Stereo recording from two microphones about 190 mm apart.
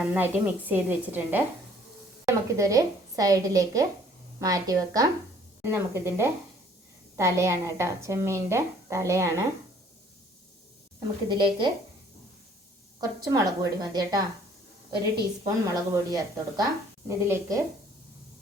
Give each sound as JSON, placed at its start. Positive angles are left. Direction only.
{"t": 0.1, "sound": "a woman's voice", "side_deg": -10}
{"t": 11.3, "sound": "a woman's voice", "side_deg": -25}
{"t": 13.0, "sound": "a woman's voice", "side_deg": -20}
{"t": 15.4, "sound": "a woman's voice", "side_deg": -20}